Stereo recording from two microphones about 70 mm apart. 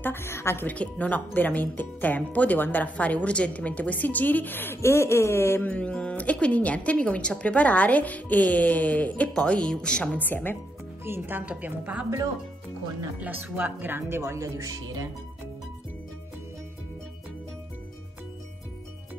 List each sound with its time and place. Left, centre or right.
0.0 s a woman's voice: left
0.7 s speech: centre; by 5.7 s left
5.7 s speech: centre
10.1 s speech: left
11.1 s speech: right
11.4 s a woman's voice: centre
13.2 s speech: right